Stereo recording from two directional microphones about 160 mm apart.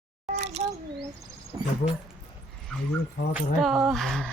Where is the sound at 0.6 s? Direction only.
40° right (ahead or behind).